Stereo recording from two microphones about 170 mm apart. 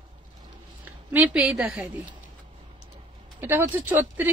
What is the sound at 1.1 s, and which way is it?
Speech, 5° right (ahead or behind).